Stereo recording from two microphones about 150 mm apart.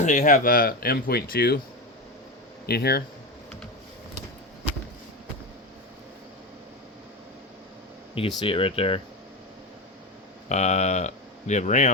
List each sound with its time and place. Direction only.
0.0 s speech: 55° left (ahead or behind); by 1.5 s 90° left
2.6 s speech: 90° left
8.4 s speech: 35° left (ahead or behind)
10.5 s speech: 50° left (ahead or behind)